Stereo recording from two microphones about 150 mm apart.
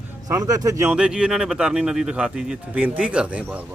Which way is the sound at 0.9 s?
5° right (ahead or behind).